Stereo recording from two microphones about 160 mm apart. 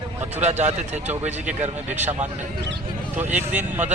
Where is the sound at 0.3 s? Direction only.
45° right (ahead or behind).